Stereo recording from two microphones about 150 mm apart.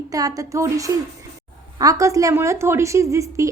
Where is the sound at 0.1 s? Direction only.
25° right (ahead or behind).